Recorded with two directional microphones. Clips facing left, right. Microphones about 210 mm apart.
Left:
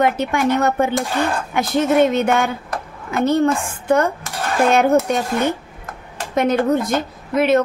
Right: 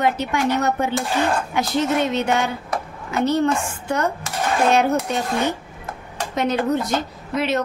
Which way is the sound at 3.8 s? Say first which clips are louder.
Left 6 dB; 55° left (ahead or behind).